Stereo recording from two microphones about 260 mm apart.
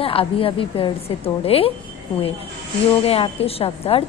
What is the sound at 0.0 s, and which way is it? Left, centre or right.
A woman's voice, left.